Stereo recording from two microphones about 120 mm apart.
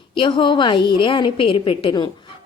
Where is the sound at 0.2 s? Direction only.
40° left (ahead or behind).